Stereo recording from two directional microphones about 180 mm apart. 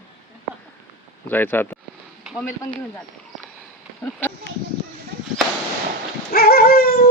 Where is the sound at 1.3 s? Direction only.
10° left (ahead or behind).